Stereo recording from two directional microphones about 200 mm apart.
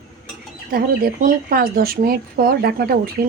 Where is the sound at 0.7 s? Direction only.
45° right (ahead or behind).